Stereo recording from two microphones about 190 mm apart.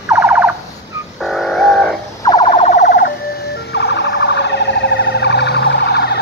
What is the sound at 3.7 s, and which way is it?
Emergency vehicle, 65° left (ahead or behind).